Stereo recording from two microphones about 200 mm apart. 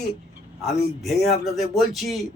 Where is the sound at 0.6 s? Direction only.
Centre (ahead or behind).